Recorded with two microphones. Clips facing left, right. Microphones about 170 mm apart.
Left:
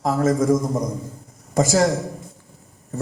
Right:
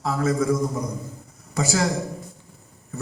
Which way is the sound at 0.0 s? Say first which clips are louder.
Left 4 dB; 45° left (ahead or behind).